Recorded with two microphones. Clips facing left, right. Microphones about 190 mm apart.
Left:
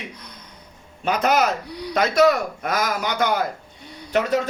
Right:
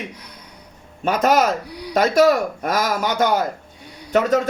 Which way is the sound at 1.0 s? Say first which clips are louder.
Right 3 dB; 45° right (ahead or behind).